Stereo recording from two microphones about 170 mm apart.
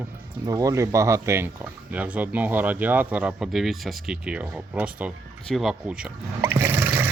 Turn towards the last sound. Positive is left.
turn(degrees=-15)  # may be behind; listen again after turning